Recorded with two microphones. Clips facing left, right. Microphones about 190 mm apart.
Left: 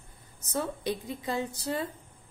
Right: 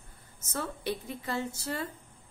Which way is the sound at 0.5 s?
15° left (ahead or behind).